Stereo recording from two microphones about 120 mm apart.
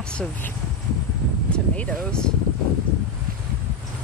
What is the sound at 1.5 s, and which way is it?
Speech, 10° left (ahead or behind).